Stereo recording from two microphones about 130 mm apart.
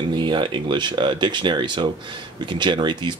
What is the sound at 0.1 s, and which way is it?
Speech, 35° right (ahead or behind).